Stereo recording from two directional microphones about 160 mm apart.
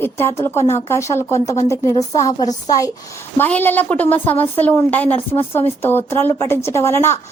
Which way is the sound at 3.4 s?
10° left (ahead or behind).